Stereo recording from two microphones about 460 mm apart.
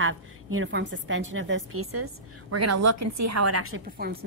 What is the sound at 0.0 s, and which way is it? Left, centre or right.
A woman's voice, right.